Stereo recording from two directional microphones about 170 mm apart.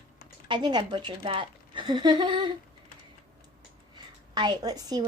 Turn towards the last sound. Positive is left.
turn(degrees=-25)  # may be behind; listen again after turning